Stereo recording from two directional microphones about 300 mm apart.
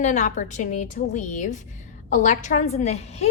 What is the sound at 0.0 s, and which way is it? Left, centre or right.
A woman's voice, left.